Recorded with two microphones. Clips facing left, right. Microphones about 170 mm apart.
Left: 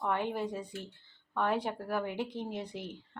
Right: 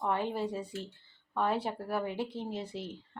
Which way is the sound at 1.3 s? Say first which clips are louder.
Even; 10° right (ahead or behind).